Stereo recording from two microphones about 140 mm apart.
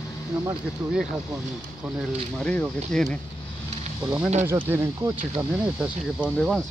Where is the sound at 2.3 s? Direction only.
5° left (ahead or behind).